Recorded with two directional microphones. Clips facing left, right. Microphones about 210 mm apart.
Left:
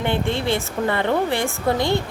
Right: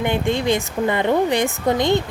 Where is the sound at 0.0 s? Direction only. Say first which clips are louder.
Right 2 dB; 15° right (ahead or behind).